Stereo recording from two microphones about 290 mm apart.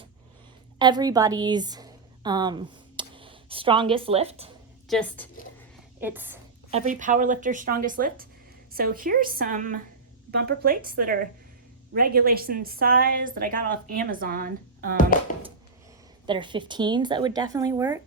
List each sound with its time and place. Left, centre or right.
0.8 s a woman's voice: centre
4.9 s a woman's voice: centre
6.0 s speech: centre
6.7 s a woman's voice: right
16.2 s speech: centre